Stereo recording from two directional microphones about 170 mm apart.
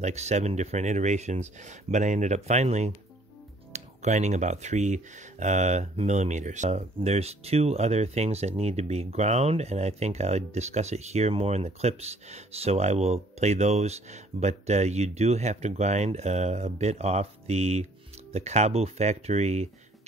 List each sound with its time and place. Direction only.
0.0 s speech: 40° right (ahead or behind)